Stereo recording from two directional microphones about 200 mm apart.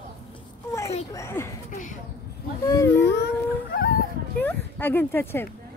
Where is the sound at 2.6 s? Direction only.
15° left (ahead or behind).